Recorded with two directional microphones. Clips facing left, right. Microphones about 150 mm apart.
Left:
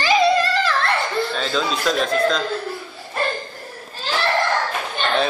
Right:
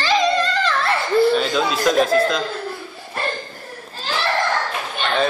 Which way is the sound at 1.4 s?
10° right (ahead or behind).